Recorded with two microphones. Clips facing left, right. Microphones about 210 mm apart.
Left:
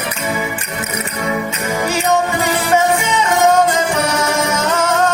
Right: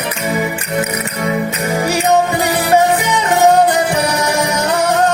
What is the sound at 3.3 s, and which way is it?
Music, 35° right (ahead or behind).